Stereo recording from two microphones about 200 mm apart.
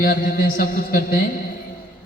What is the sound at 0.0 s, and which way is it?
Speech, 45° left (ahead or behind).